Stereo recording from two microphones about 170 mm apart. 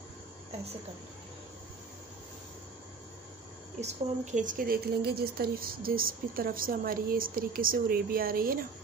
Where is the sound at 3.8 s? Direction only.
40° right (ahead or behind); by 8.6 s 60° right (ahead or behind).